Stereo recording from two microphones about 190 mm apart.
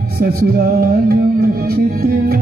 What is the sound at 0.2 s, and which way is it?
Music, 55° right (ahead or behind).